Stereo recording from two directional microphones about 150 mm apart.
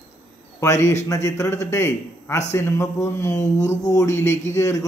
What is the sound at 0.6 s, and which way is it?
A man's voice, 15° left (ahead or behind).